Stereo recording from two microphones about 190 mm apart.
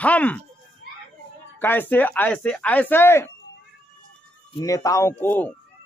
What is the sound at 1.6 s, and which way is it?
A man's voice, 10° left (ahead or behind).